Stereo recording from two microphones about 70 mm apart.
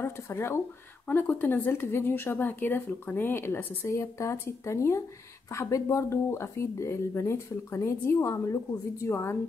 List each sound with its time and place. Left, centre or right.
0.0 s speech: left
3.9 s speech: left